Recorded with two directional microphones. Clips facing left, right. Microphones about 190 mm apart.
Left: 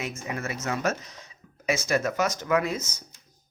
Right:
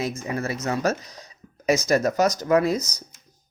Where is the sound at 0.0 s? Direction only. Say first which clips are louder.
Right 5 dB; 35° right (ahead or behind).